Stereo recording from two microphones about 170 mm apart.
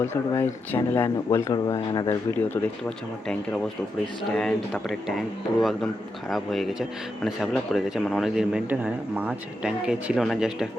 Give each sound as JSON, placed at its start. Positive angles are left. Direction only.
{"t": 0.0, "sound": "a man's voice", "side_deg": 15}